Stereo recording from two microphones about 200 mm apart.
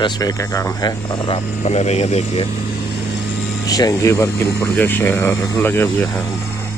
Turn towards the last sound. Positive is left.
turn(degrees=10)  # may be behind; listen again after turning